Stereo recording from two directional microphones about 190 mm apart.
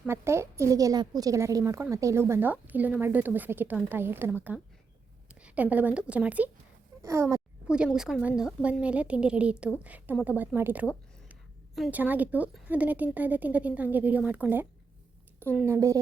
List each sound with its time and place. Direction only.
0.0 s a woman's voice: 15° right (ahead or behind)
7.7 s a woman's voice: 5° right (ahead or behind)